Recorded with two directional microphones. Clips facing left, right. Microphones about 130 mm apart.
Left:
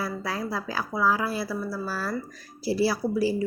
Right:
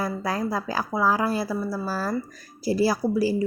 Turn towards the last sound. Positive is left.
turn(degrees=-40)  # may be behind; listen again after turning